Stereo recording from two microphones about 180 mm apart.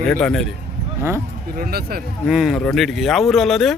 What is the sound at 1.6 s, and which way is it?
Speech, 60° right (ahead or behind).